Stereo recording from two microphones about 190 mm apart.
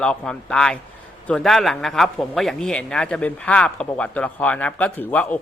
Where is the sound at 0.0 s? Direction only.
5° left (ahead or behind).